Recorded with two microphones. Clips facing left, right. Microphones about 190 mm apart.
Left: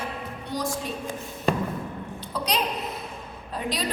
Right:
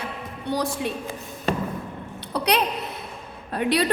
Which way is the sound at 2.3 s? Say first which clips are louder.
Right 6 dB; 65° right (ahead or behind).